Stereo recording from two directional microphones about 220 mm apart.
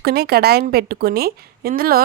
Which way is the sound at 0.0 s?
45° right (ahead or behind).